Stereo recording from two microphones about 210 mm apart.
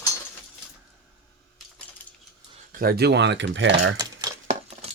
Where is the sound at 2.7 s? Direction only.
45° right (ahead or behind).